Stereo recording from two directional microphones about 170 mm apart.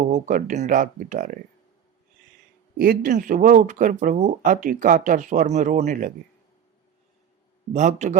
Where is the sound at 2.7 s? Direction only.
60° right (ahead or behind).